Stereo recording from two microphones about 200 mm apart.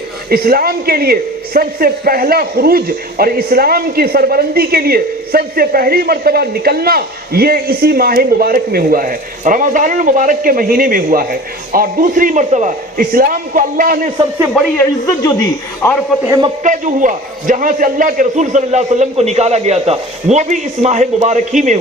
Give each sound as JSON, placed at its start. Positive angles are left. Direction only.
{"t": 0.3, "sound": "a man's voice", "side_deg": -50}
{"t": 14.5, "sound": "a man's voice", "side_deg": 5}
{"t": 16.6, "sound": "a man's voice", "side_deg": -40}